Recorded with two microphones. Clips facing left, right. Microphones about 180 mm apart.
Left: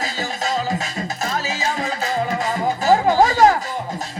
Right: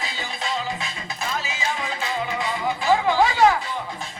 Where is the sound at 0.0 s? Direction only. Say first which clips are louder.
Left 6 dB; 40° left (ahead or behind).